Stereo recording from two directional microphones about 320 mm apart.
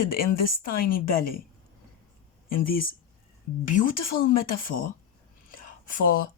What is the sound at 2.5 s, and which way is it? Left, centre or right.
Speech, left.